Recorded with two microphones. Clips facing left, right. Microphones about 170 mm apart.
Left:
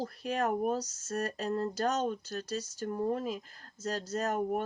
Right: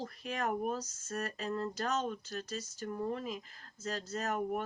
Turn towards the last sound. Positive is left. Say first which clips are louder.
# left 4 dB
turn(degrees=40)  # may be behind; listen again after turning